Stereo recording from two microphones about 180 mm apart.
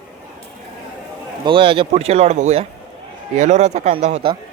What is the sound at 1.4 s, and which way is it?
Speech, 30° right (ahead or behind).